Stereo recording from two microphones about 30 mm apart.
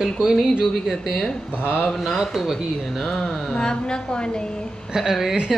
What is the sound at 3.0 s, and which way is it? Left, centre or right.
Speech, centre.